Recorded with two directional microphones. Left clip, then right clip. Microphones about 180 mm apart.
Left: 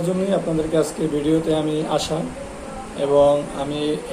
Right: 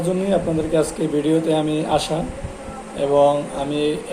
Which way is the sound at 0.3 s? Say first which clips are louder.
Right 2 dB; 10° right (ahead or behind).